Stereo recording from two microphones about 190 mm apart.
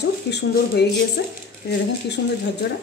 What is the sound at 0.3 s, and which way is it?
Speech, 60° left (ahead or behind).